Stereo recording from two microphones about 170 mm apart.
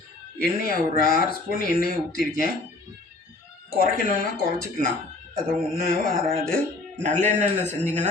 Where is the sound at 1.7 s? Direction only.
65° left (ahead or behind).